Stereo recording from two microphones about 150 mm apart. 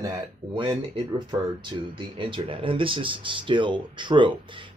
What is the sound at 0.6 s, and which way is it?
Speech, 30° right (ahead or behind).